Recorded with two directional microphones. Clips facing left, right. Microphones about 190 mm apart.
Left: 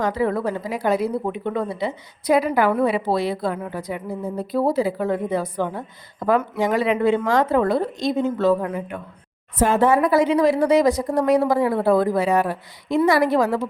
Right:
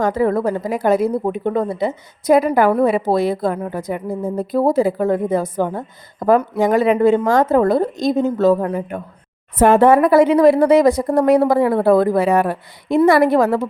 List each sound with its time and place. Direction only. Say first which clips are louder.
0.0 s a woman's voice: right 5 dB; 45° right (ahead or behind)
9.6 s speech: right 6 dB; 60° right (ahead or behind)